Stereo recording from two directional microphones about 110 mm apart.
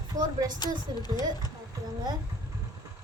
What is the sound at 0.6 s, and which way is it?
Speech, 40° left (ahead or behind).